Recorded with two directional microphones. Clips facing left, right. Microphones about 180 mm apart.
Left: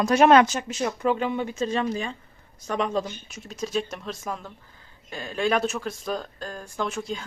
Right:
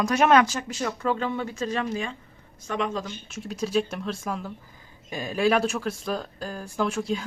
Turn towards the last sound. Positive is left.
turn(degrees=0)  # may be behind; listen again after turning